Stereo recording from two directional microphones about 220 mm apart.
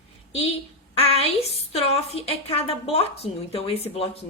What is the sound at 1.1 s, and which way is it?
A woman's voice, 25° left (ahead or behind).